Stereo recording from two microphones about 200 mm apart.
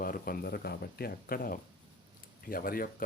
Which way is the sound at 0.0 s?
45° left (ahead or behind).